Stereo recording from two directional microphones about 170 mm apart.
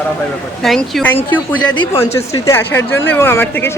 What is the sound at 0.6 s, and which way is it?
Speech, centre (ahead or behind).